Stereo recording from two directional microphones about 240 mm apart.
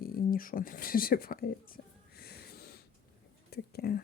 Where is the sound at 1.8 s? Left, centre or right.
Left.